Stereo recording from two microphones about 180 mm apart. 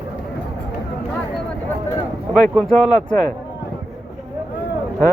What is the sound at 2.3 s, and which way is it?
Speech, 5° right (ahead or behind).